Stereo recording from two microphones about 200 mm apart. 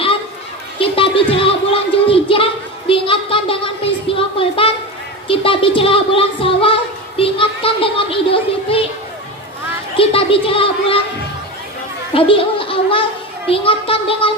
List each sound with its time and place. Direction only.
0.8 s speech: 25° left (ahead or behind)
10.0 s speech: 25° left (ahead or behind)
12.1 s speech: 25° left (ahead or behind)